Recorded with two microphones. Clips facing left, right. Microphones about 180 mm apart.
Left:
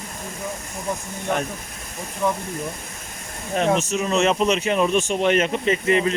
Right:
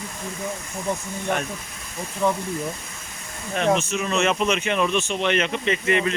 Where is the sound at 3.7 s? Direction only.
35° left (ahead or behind).